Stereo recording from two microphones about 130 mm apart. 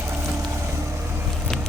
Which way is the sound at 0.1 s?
20° right (ahead or behind).